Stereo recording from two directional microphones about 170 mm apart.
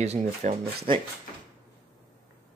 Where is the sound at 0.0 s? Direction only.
45° right (ahead or behind).